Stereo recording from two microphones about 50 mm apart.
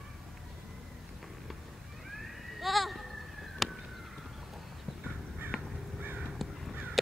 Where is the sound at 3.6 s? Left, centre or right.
Centre.